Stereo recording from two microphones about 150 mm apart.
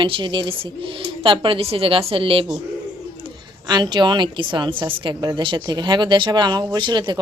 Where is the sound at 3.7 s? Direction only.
30° right (ahead or behind).